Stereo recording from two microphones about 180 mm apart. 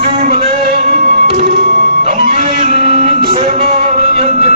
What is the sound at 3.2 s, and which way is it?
Music, 40° right (ahead or behind).